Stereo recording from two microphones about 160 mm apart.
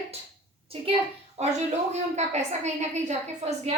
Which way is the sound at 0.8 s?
35° right (ahead or behind).